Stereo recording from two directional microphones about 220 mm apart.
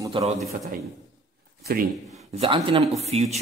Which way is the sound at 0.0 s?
15° right (ahead or behind).